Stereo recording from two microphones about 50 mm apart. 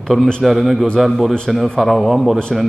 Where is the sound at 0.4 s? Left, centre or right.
Centre.